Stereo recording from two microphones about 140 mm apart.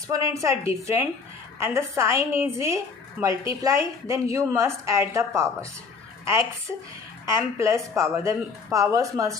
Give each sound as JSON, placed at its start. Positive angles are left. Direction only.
{"t": 0.1, "sound": "a woman's voice", "side_deg": -20}